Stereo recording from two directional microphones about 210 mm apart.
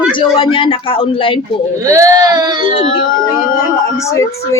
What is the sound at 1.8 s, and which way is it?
Speech, 15° right (ahead or behind).